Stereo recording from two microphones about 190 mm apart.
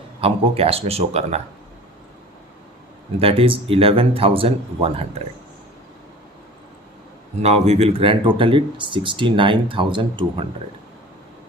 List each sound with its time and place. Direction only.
0.2 s a man's voice: 30° right (ahead or behind)
3.2 s speech: 30° right (ahead or behind)
7.4 s speech: 35° right (ahead or behind)